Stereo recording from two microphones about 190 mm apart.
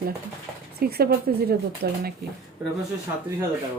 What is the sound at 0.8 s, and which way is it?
A woman's voice, 55° right (ahead or behind).